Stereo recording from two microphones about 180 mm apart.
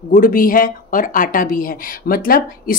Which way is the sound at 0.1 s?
50° left (ahead or behind).